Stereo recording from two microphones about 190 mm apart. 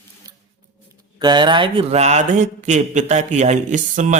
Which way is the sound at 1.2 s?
25° right (ahead or behind).